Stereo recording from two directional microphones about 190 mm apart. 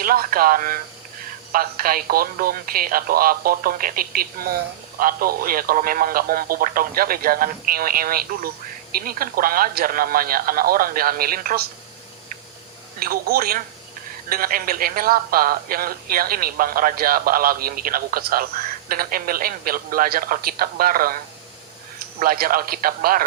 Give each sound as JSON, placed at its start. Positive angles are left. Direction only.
{"t": 0.0, "sound": "speech", "side_deg": -50}
{"t": 13.0, "sound": "speech", "side_deg": -50}
{"t": 22.2, "sound": "speech", "side_deg": -50}